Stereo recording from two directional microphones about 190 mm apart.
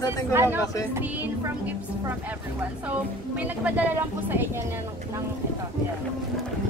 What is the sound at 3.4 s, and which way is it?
Speech, 10° right (ahead or behind).